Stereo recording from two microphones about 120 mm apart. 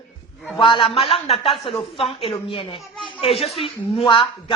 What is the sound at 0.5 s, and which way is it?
A man's voice, 45° left (ahead or behind).